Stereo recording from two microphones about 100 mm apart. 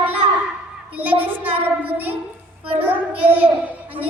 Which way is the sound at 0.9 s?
15° right (ahead or behind).